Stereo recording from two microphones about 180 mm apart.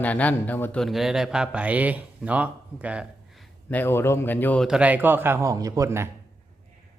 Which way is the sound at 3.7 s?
10° left (ahead or behind).